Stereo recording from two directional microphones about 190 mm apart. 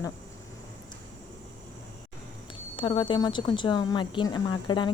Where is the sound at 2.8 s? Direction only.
25° left (ahead or behind).